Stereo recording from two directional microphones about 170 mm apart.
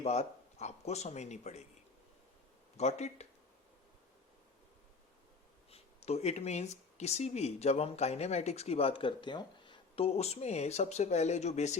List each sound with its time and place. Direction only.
0.0 s speech: 40° left (ahead or behind)
2.7 s speech: 40° left (ahead or behind)
5.7 s speech: 40° left (ahead or behind)